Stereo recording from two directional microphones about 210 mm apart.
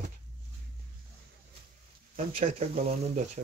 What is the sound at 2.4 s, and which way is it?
Speech, 30° right (ahead or behind).